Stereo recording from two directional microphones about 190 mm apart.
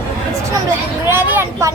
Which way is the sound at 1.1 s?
10° right (ahead or behind).